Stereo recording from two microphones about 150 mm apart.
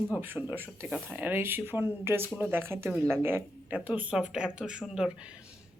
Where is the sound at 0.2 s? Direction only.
15° right (ahead or behind).